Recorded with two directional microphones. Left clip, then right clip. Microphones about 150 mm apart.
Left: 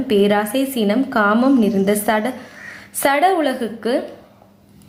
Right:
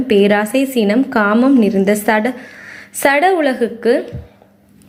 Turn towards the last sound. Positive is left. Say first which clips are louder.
# right 6 dB
turn(degrees=-15)  # may be behind; listen again after turning